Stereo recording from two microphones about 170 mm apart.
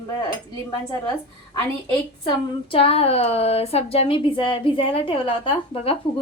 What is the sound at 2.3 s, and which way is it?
Speech, 35° left (ahead or behind).